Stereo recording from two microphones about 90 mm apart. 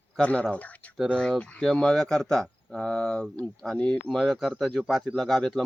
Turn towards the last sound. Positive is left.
turn(degrees=5)  # may be behind; listen again after turning